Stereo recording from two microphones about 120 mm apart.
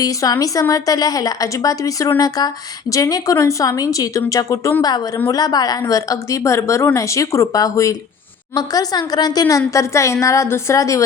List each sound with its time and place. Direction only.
0.0 s a woman's voice: 30° left (ahead or behind)